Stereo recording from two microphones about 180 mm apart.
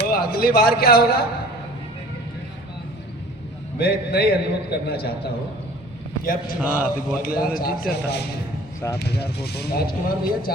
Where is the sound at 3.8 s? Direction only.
60° left (ahead or behind).